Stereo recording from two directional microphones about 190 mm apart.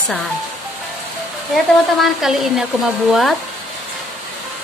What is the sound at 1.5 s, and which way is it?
Speech, centre (ahead or behind).